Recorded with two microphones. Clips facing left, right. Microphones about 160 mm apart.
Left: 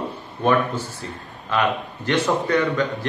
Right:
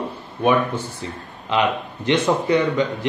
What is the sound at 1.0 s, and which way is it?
A man's voice, 20° right (ahead or behind).